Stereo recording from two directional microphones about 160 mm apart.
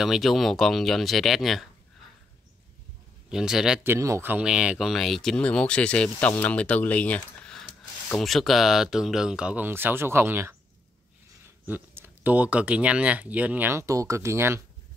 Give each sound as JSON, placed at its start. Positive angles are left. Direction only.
{"t": 0.0, "sound": "speech", "side_deg": 0}
{"t": 3.3, "sound": "speech", "side_deg": -5}
{"t": 3.8, "sound": "speech", "side_deg": -15}
{"t": 11.6, "sound": "speech", "side_deg": -10}